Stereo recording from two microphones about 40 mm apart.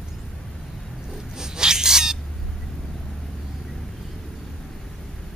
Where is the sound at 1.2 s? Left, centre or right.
Centre.